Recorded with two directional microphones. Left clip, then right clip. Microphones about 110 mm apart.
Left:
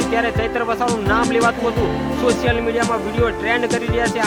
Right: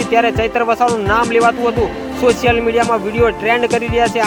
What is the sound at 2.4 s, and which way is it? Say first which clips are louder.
Music: right 5 dB; 40° right (ahead or behind).